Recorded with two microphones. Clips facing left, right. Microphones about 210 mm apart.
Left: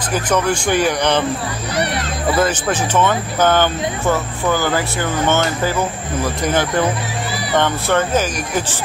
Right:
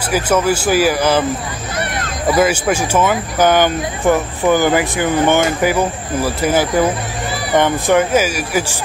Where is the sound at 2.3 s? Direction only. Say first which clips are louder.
Right 4 dB; 10° right (ahead or behind).